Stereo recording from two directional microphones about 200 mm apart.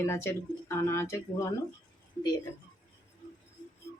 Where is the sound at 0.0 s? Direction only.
10° left (ahead or behind).